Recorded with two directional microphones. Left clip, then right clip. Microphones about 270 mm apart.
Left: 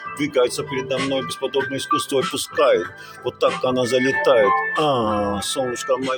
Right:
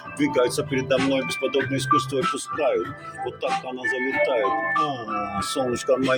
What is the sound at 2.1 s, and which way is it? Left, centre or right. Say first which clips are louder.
Speech: left 3 dB; left.